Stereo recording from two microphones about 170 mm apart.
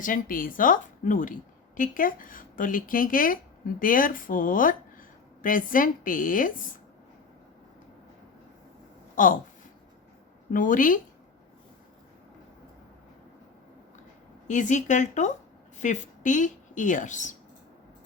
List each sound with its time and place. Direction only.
0.0 s a woman's voice: 55° left (ahead or behind)
9.1 s speech: 50° left (ahead or behind)
10.5 s a woman's voice: 50° left (ahead or behind)
14.4 s a woman's voice: 45° left (ahead or behind)